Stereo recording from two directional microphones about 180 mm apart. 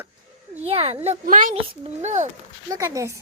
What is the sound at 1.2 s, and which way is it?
Speech, 50° right (ahead or behind).